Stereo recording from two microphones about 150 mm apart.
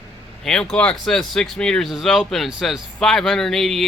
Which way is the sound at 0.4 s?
5° left (ahead or behind).